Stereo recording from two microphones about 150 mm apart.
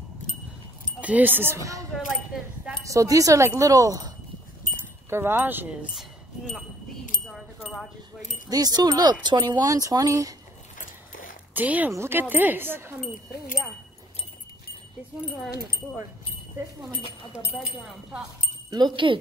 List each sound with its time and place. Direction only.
1.0 s speech: 10° right (ahead or behind)
5.1 s speech: 15° right (ahead or behind)
5.9 s a sound: centre (ahead or behind)
7.2 s wind chime: centre (ahead or behind)
8.5 s speech: 25° right (ahead or behind)
10.8 s a sound: 60° left (ahead or behind)
11.5 s speech: 10° right (ahead or behind)
16.6 s speech: 15° right (ahead or behind)
18.7 s speech: 30° right (ahead or behind)